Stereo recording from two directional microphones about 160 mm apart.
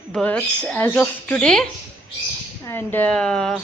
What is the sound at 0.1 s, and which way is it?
A woman's voice, 10° left (ahead or behind).